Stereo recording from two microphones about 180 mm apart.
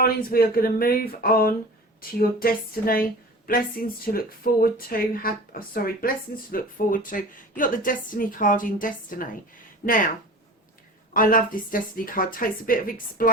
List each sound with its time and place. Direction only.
0.0 s a woman's voice: 55° left (ahead or behind)
11.1 s a woman's voice: 50° left (ahead or behind)